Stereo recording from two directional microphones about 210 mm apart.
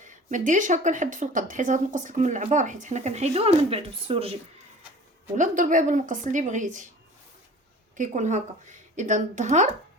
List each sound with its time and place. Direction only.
0.0 s speech: 35° right (ahead or behind)
7.9 s speech: 35° right (ahead or behind)